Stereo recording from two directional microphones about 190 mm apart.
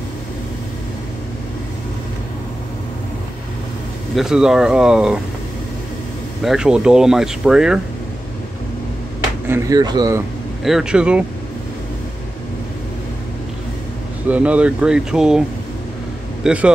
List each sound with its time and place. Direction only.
4.1 s speech: centre (ahead or behind)
6.4 s speech: 5° right (ahead or behind)
9.5 s speech: 20° right (ahead or behind)
10.6 s speech: centre (ahead or behind)
14.3 s speech: 5° right (ahead or behind)
16.4 s speech: 5° right (ahead or behind)